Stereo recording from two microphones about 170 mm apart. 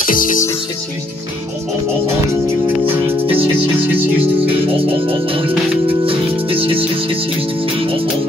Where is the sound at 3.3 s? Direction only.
30° right (ahead or behind).